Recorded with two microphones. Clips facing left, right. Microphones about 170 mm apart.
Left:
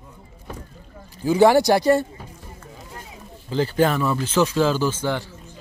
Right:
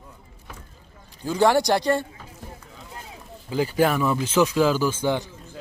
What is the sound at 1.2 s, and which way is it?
Speech, 10° left (ahead or behind).